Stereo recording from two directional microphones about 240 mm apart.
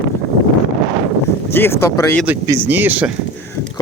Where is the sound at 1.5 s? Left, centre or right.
Centre.